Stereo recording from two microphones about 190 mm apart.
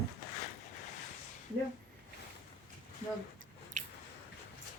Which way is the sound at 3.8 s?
40° right (ahead or behind).